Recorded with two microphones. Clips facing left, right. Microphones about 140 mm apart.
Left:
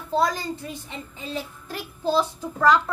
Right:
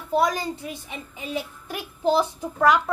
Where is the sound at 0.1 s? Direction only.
15° right (ahead or behind).